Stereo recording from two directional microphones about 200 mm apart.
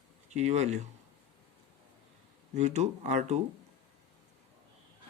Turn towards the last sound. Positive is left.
turn(degrees=-35)  # may be behind; listen again after turning